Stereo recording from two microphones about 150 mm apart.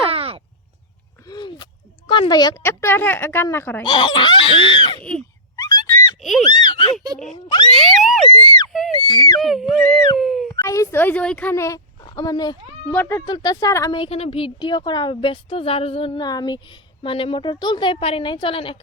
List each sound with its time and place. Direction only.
0.1 s caw: 40° right (ahead or behind)
1.3 s a sound: 30° left (ahead or behind)
2.0 s speech: 30° left (ahead or behind)
2.6 s speech: 15° left (ahead or behind)
3.8 s a woman's voice: 35° left (ahead or behind)
5.5 s a sound: 25° left (ahead or behind)
7.8 s speech: centre (ahead or behind)
8.3 s speech: 35° left (ahead or behind)
9.4 s speech: centre (ahead or behind)
10.2 s a sound: centre (ahead or behind)
10.5 s speech: 20° left (ahead or behind)
12.9 s speech: 15° left (ahead or behind)
13.2 s speech: 25° left (ahead or behind)
13.9 s a woman's voice: 40° left (ahead or behind)